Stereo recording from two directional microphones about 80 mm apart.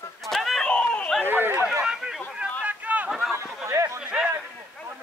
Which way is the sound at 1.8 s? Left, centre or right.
Centre.